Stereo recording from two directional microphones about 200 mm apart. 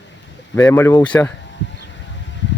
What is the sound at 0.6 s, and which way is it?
Speech, 10° left (ahead or behind).